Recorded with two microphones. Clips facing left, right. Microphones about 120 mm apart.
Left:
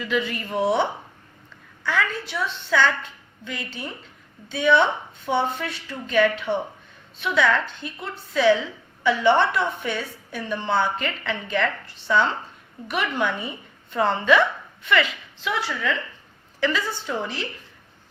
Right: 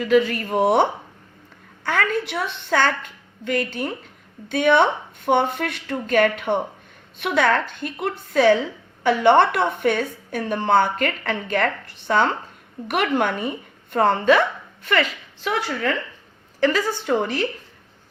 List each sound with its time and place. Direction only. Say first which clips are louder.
0.0 s a woman's voice: right 8 dB; 45° right (ahead or behind)
17.1 s speech: right 9 dB; 60° right (ahead or behind)